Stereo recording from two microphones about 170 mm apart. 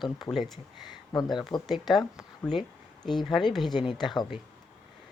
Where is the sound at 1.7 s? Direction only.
Centre (ahead or behind).